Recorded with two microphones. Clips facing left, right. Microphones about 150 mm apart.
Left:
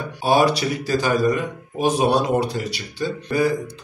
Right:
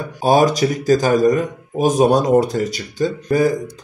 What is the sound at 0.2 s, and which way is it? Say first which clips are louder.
Speech: right 4 dB; 45° right (ahead or behind).